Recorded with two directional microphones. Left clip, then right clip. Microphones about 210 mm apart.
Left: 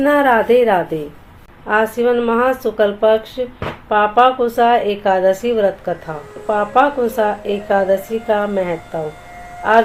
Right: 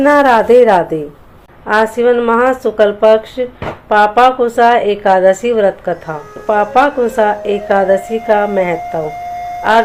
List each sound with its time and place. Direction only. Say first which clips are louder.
0.0 s a woman's voice: right 4 dB; 15° right (ahead or behind)